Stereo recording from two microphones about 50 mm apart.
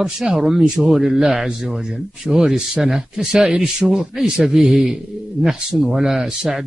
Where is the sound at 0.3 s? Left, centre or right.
Centre.